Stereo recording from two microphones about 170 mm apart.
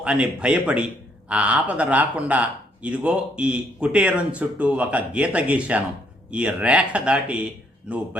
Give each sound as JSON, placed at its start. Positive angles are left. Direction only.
{"t": 0.0, "sound": "speech", "side_deg": -5}